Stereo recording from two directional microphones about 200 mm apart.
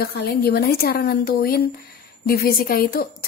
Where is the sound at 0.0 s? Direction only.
50° left (ahead or behind).